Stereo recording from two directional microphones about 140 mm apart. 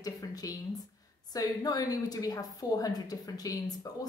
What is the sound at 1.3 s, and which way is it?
A woman's voice, 25° left (ahead or behind).